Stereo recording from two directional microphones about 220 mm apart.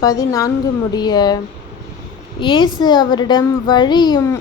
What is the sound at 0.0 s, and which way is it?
A woman's voice, 15° left (ahead or behind).